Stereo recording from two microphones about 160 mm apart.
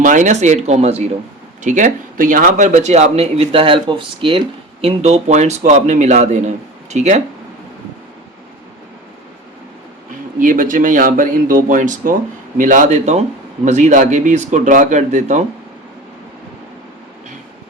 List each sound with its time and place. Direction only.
0.0 s speech: 55° right (ahead or behind)
10.4 s speech: 55° right (ahead or behind)